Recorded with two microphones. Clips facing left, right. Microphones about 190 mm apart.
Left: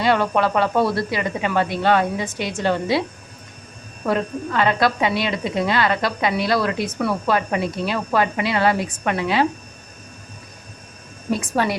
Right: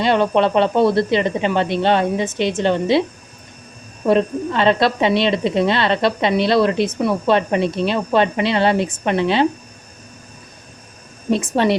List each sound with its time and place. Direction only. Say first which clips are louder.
0.0 s speech: right 3 dB; 25° right (ahead or behind)
4.0 s speech: right 6 dB; 25° right (ahead or behind)
11.3 s speech: right 4 dB; 25° right (ahead or behind)